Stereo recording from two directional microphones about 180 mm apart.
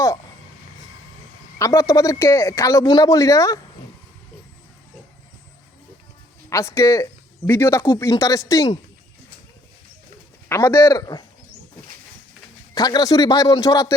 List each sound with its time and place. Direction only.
1.5 s speech: 15° left (ahead or behind)
6.5 s speech: 15° left (ahead or behind)
10.5 s speech: 15° left (ahead or behind)
12.7 s speech: 20° left (ahead or behind)